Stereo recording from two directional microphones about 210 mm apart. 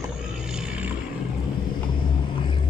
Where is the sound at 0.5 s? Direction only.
5° right (ahead or behind).